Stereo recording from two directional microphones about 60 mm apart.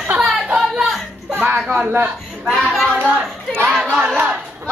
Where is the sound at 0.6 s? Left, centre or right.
Centre.